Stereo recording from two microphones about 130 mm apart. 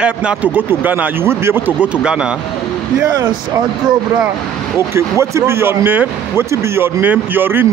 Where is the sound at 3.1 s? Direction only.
25° right (ahead or behind).